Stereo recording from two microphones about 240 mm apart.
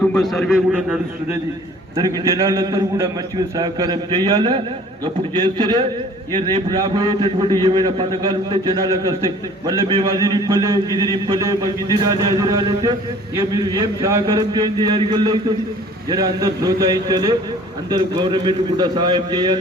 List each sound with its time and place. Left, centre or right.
0.0 s a man's voice: centre
2.0 s a man's voice: centre